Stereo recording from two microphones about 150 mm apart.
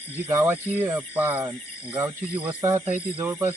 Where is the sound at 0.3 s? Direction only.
15° right (ahead or behind).